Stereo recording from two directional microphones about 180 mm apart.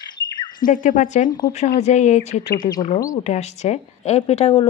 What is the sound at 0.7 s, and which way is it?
A woman's voice, 45° left (ahead or behind).